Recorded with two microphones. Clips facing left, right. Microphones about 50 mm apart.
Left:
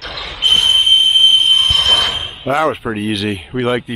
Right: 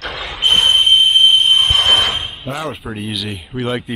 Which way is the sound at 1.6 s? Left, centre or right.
Right.